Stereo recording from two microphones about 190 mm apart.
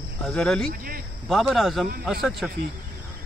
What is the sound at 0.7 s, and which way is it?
Speech, 50° right (ahead or behind).